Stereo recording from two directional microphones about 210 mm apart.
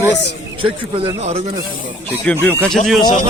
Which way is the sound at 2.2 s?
5° left (ahead or behind).